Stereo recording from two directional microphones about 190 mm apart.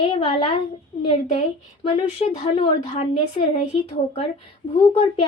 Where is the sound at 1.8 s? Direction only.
30° left (ahead or behind).